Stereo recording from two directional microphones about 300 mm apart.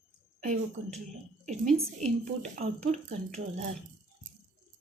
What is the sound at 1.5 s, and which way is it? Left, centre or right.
A woman's voice, right.